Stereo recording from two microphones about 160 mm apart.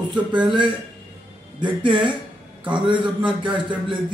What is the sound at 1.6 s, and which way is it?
A man's voice, 30° right (ahead or behind).